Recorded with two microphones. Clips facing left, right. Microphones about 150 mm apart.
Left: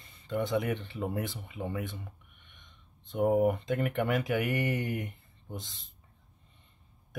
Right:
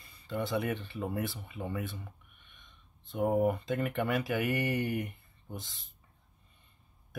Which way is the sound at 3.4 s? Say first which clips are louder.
Left 2 dB; 20° left (ahead or behind).